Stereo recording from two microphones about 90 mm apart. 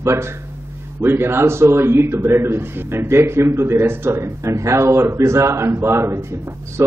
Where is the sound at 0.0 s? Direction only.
30° right (ahead or behind).